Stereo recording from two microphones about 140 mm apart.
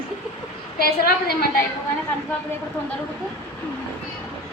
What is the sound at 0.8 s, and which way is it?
Speech, 90° left.